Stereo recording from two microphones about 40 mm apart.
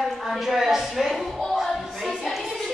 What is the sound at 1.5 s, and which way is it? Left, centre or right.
Music, centre.